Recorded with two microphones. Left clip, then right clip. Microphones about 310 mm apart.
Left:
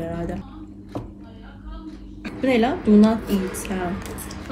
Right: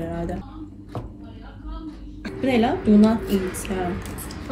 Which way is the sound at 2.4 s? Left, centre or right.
Centre.